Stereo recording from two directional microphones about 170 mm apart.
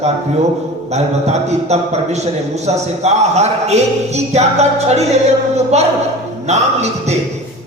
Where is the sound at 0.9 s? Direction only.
40° right (ahead or behind).